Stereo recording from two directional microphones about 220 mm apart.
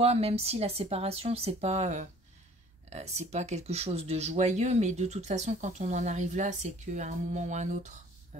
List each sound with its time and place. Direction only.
0.0 s speech: 30° right (ahead or behind)